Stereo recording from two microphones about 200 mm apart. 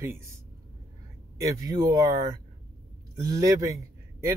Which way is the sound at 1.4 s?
15° right (ahead or behind).